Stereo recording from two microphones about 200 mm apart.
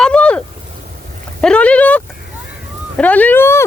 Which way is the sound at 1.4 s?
5° left (ahead or behind).